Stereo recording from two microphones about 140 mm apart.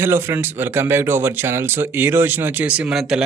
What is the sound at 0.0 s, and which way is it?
A man's voice, 15° right (ahead or behind).